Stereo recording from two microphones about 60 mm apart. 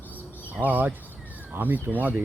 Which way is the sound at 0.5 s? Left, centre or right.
Right.